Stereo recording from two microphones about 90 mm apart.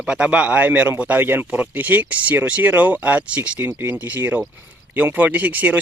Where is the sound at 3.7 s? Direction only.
25° right (ahead or behind).